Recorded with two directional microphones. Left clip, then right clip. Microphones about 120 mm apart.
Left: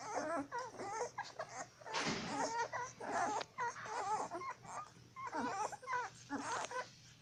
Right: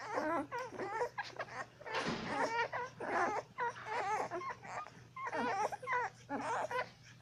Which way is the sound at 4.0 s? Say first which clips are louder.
Right 3 dB; 20° right (ahead or behind).